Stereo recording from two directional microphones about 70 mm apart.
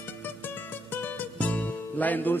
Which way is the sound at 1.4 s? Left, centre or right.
Left.